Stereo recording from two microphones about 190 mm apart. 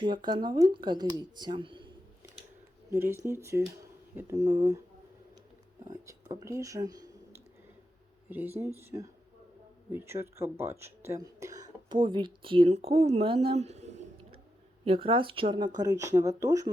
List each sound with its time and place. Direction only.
0.0 s speech: 25° right (ahead or behind)
2.9 s speech: 15° right (ahead or behind)
5.9 s speech: 20° right (ahead or behind)
8.3 s speech: 10° right (ahead or behind)